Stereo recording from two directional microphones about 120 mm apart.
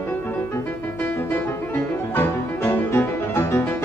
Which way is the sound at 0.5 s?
20° left (ahead or behind).